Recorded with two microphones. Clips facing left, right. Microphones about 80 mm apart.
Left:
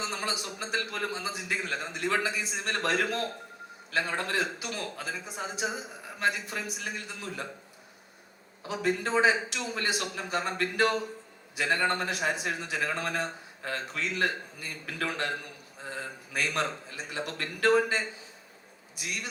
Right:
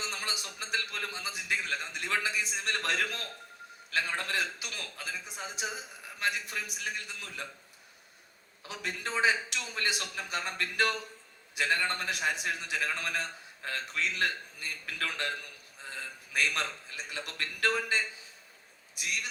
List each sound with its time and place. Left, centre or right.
0.0 s a man's voice: left
8.6 s a man's voice: left